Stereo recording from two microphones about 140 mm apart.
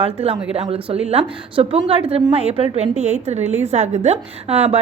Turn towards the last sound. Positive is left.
turn(degrees=-45)  # may be behind; listen again after turning